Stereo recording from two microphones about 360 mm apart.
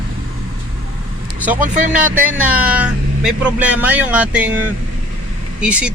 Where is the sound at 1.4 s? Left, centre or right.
Centre.